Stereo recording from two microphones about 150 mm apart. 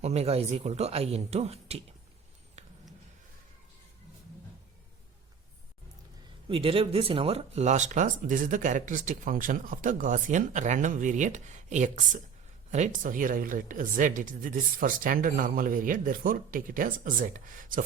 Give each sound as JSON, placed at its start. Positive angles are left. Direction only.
{"t": 0.0, "sound": "speech", "side_deg": -45}
{"t": 2.6, "sound": "a sound", "side_deg": -45}
{"t": 6.5, "sound": "speech", "side_deg": -35}